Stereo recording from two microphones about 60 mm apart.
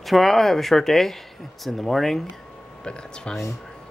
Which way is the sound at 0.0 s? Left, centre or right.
Centre.